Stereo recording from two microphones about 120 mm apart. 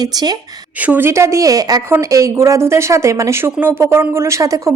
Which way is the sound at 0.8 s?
15° right (ahead or behind).